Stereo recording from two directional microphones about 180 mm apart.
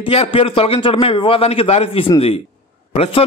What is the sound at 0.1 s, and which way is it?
A man's voice, 30° left (ahead or behind).